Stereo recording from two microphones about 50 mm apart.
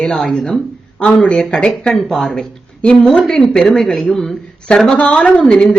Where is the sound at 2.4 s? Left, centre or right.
Centre.